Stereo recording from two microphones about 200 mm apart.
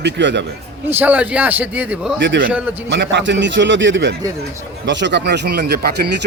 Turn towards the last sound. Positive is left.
turn(degrees=-55)  # may be behind; listen again after turning